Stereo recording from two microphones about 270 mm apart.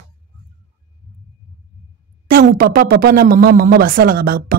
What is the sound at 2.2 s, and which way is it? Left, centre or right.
Speech, right.